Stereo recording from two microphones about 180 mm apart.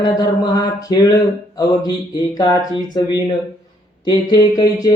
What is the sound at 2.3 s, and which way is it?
Speech, 25° left (ahead or behind).